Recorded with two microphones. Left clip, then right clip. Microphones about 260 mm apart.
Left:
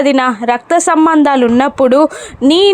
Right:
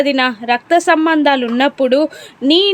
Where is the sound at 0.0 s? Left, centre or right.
Centre.